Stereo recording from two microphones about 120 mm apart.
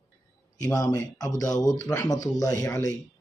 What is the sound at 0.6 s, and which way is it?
Speech, 30° left (ahead or behind).